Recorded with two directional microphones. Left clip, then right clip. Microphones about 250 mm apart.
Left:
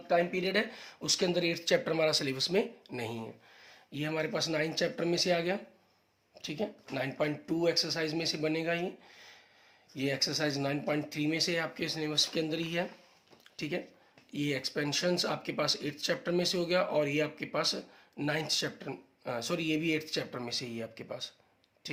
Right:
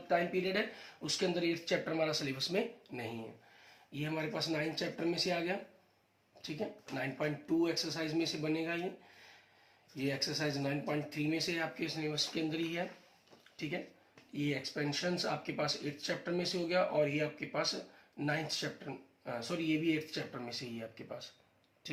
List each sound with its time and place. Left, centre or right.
0.1 s speech: left
9.9 s speech: left